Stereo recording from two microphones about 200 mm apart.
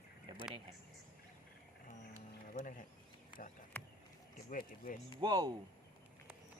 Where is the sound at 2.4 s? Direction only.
40° left (ahead or behind).